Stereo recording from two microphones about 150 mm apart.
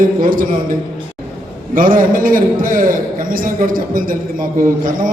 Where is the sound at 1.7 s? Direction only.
65° right (ahead or behind).